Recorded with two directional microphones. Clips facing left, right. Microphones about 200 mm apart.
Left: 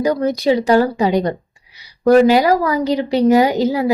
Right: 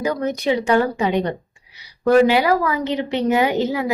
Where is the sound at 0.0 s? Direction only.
35° left (ahead or behind).